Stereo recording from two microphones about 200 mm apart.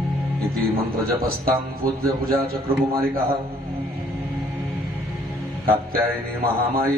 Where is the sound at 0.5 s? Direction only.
Centre (ahead or behind).